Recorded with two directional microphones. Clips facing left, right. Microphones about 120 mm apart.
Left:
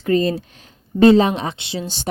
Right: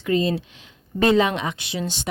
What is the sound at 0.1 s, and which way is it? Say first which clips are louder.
Speech: left 3 dB; 45° left (ahead or behind).